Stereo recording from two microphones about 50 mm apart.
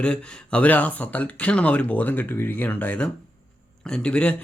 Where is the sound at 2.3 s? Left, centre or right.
Left.